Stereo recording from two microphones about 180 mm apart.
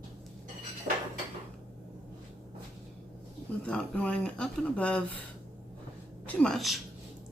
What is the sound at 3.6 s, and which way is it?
Speech, 5° left (ahead or behind).